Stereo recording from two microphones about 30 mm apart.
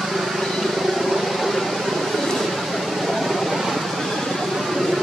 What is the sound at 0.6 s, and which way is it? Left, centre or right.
Vehicle, centre.